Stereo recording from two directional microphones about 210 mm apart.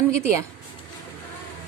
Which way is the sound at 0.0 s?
15° right (ahead or behind).